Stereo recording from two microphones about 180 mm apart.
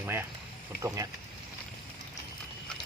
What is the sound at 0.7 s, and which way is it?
Speech, 60° left (ahead or behind).